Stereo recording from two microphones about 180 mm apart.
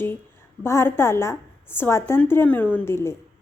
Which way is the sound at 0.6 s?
15° left (ahead or behind).